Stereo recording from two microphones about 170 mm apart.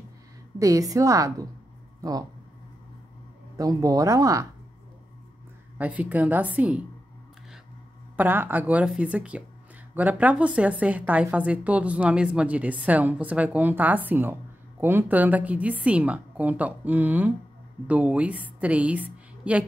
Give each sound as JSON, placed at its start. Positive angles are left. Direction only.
{"t": 0.6, "sound": "speech", "side_deg": -20}
{"t": 2.0, "sound": "a sound", "side_deg": -20}
{"t": 3.5, "sound": "speech", "side_deg": -20}
{"t": 5.8, "sound": "a woman's voice", "side_deg": -10}
{"t": 8.2, "sound": "a woman's voice", "side_deg": -10}